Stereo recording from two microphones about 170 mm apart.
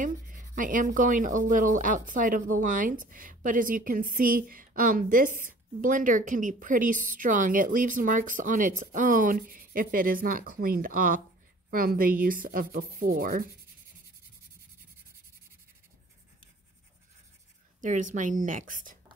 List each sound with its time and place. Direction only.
0.0 s speech: 50° right (ahead or behind)
17.8 s speech: 45° right (ahead or behind)